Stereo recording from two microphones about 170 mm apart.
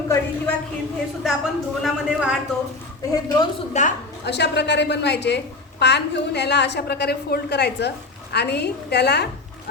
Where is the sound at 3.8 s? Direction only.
45° left (ahead or behind).